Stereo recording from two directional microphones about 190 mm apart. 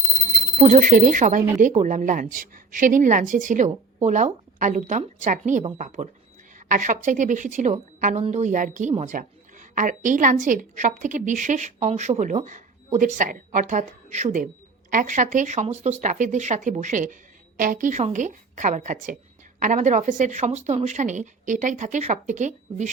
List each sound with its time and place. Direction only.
0.2 s a woman's voice: 45° right (ahead or behind)